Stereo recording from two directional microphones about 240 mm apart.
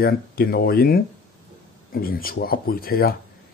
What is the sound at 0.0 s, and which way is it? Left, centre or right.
Speech, left.